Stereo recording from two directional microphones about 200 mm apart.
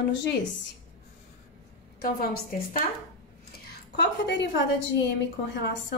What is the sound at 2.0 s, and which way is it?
Speech, 45° left (ahead or behind).